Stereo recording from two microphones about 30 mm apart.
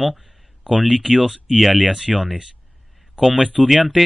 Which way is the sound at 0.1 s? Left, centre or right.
Centre.